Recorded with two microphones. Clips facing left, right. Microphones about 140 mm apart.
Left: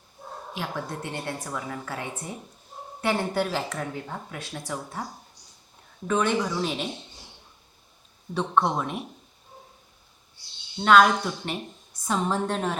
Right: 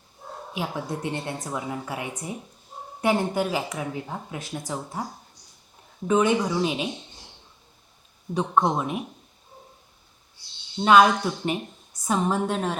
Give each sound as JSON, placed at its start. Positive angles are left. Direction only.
{"t": 0.5, "sound": "a woman's voice", "side_deg": -10}
{"t": 6.1, "sound": "a woman's voice", "side_deg": -15}
{"t": 8.3, "sound": "speech", "side_deg": -5}
{"t": 10.8, "sound": "a woman's voice", "side_deg": -15}